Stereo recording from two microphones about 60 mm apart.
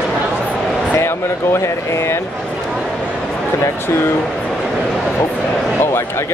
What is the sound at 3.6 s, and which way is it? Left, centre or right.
Speech, left.